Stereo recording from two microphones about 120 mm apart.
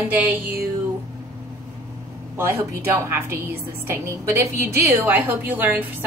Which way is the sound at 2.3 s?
20° right (ahead or behind).